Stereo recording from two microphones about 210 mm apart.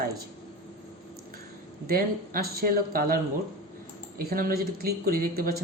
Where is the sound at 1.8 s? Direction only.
45° right (ahead or behind).